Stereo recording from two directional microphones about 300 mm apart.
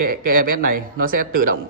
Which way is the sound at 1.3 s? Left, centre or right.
Right.